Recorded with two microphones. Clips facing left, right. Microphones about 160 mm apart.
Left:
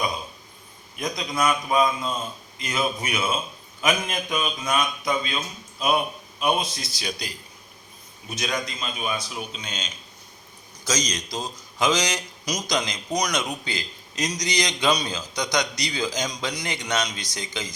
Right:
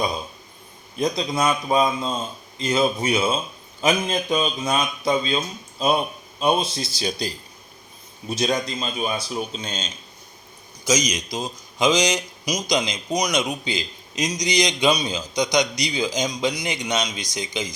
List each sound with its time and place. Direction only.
0.9 s a man's voice: 30° right (ahead or behind)
10.8 s a man's voice: 10° right (ahead or behind)